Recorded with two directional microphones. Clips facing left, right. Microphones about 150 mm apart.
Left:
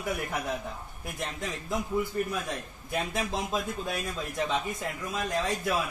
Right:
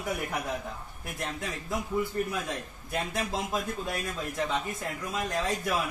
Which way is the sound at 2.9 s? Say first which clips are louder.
Left 1 dB; 10° left (ahead or behind).